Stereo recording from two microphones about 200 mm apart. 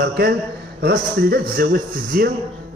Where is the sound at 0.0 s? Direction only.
50° right (ahead or behind).